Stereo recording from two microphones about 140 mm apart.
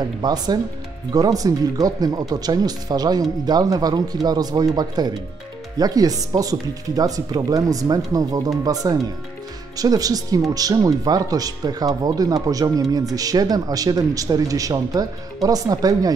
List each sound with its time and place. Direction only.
0.2 s speech: 30° right (ahead or behind)